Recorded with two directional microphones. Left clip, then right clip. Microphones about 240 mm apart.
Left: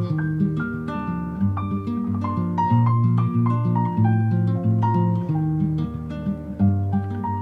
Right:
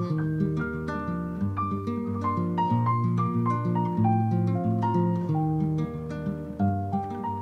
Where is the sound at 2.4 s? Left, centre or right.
Left.